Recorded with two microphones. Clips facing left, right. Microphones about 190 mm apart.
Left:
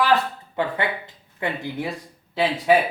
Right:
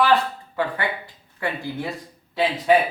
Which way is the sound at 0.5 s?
20° left (ahead or behind).